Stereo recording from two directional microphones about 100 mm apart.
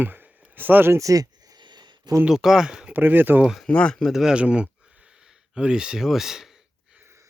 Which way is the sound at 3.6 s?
10° left (ahead or behind).